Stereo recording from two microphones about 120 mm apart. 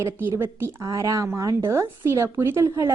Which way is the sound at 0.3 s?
20° right (ahead or behind).